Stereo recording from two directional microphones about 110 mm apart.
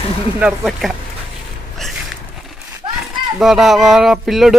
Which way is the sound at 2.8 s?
45° right (ahead or behind).